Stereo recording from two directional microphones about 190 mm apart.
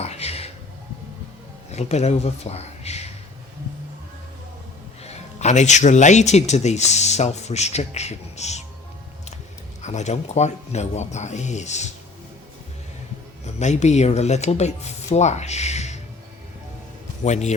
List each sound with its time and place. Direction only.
0.0 s music: 35° left (ahead or behind)
1.7 s speech: 35° left (ahead or behind)
5.0 s speech: 35° left (ahead or behind)
9.8 s speech: 35° left (ahead or behind)
13.4 s speech: 35° left (ahead or behind)
17.2 s speech: 35° left (ahead or behind)